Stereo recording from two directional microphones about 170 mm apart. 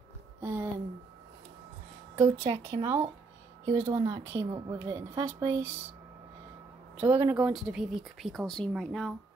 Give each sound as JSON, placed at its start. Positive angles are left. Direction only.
{"t": 0.4, "sound": "a sound", "side_deg": -10}
{"t": 2.1, "sound": "speech", "side_deg": -20}
{"t": 7.0, "sound": "speech", "side_deg": -10}